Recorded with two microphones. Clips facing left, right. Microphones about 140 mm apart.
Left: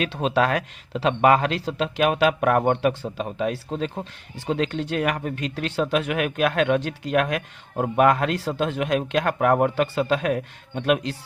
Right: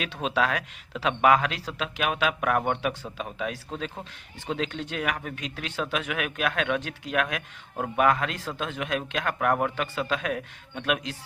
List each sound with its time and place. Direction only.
0.1 s speech: 40° left (ahead or behind)
3.0 s speech: 30° left (ahead or behind)